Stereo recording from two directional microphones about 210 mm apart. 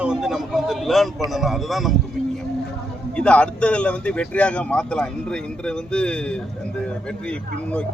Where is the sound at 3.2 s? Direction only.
5° left (ahead or behind).